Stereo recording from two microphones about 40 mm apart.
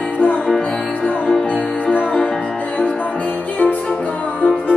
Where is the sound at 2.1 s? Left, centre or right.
Centre.